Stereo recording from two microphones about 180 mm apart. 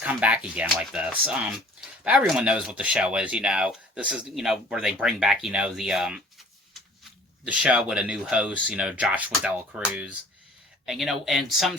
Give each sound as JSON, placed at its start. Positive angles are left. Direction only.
{"t": 0.0, "sound": "speech", "side_deg": -5}